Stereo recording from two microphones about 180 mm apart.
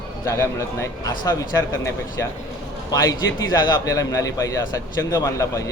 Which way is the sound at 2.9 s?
20° left (ahead or behind).